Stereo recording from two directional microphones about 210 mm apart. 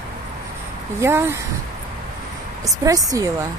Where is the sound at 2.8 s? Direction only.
15° right (ahead or behind).